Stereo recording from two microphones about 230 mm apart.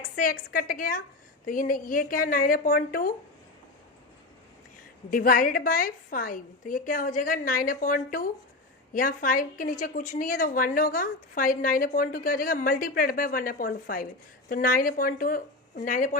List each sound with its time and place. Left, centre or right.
0.2 s a woman's voice: left
5.1 s a woman's voice: left